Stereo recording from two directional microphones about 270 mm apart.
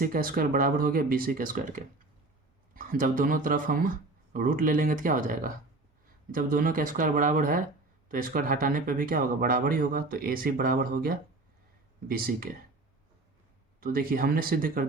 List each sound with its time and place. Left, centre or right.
0.0 s speech: right
13.8 s speech: right